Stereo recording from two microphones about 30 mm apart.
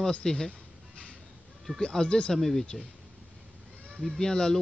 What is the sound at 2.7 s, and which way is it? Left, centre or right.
Speech, centre.